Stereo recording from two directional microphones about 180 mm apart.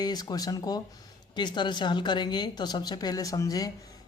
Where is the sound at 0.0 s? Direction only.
20° left (ahead or behind).